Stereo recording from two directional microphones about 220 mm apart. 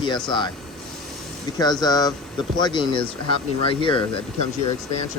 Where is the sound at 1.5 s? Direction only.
20° left (ahead or behind).